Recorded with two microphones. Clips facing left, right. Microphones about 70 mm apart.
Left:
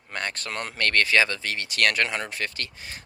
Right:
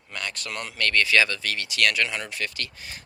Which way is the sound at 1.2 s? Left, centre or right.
Left.